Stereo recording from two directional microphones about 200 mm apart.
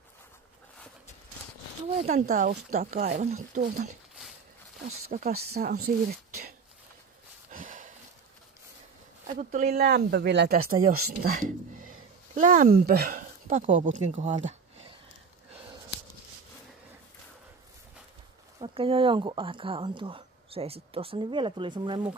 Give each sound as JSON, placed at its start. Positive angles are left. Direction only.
{"t": 2.0, "sound": "speech", "side_deg": -35}
{"t": 5.1, "sound": "speech", "side_deg": -40}
{"t": 7.5, "sound": "a sound", "side_deg": -40}
{"t": 9.3, "sound": "speech", "side_deg": -40}
{"t": 11.2, "sound": "speech", "side_deg": -40}
{"t": 18.6, "sound": "speech", "side_deg": -25}